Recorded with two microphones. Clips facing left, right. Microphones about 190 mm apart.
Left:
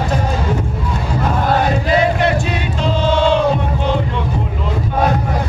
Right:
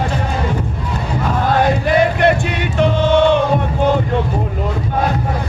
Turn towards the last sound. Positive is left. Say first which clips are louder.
# right 1 dB
turn(degrees=-55)  # may be behind; listen again after turning